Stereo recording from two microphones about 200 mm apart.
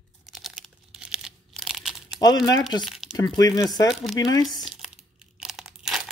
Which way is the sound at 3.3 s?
20° left (ahead or behind).